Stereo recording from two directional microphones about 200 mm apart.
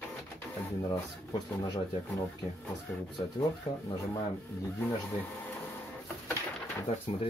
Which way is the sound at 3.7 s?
30° left (ahead or behind).